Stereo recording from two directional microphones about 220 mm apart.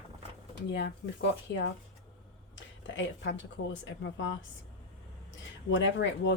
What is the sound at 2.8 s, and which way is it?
Speech, 55° left (ahead or behind).